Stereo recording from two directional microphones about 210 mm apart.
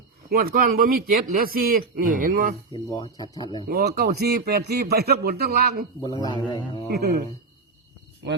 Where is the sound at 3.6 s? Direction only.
40° right (ahead or behind).